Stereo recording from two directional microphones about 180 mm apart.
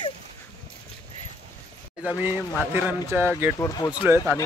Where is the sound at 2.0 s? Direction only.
10° right (ahead or behind).